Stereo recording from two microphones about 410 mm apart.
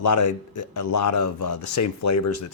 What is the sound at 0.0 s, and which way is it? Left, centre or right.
Speech, left.